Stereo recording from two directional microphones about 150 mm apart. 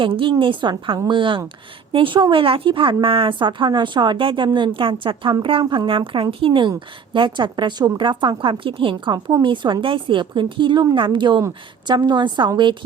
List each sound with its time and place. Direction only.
0.0 s a woman's voice: 35° right (ahead or behind)